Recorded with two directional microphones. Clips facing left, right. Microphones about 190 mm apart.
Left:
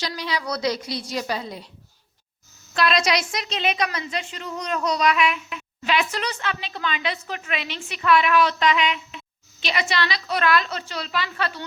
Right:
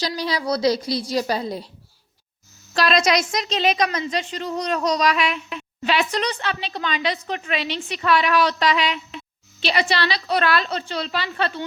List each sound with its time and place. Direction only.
0.2 s speech: 35° right (ahead or behind)
2.7 s speech: 40° right (ahead or behind)